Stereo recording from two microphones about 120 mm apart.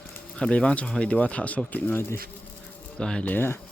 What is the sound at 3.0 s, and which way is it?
Speech, 10° left (ahead or behind).